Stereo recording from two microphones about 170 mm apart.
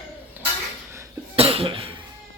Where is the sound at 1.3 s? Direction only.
35° right (ahead or behind).